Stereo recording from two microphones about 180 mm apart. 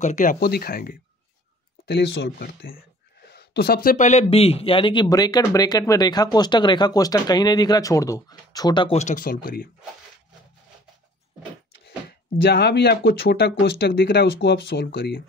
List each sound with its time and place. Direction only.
0.0 s speech: 45° left (ahead or behind)
1.9 s speech: 70° left (ahead or behind); by 8.9 s 25° left (ahead or behind)
8.9 s speech: 45° left (ahead or behind)
11.8 s speech: 60° left (ahead or behind)